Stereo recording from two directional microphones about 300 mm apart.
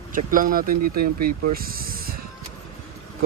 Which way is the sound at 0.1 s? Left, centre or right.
Right.